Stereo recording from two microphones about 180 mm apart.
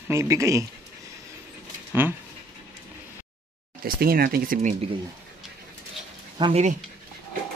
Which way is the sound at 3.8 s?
55° right (ahead or behind).